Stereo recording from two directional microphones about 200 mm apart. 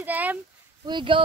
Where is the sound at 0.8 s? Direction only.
25° right (ahead or behind).